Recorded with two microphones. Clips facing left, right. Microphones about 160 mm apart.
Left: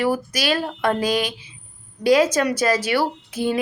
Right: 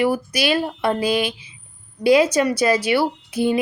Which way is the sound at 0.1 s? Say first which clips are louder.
Right 2 dB; 10° right (ahead or behind).